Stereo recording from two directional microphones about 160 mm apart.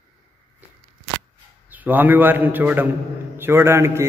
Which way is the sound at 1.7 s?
10° right (ahead or behind).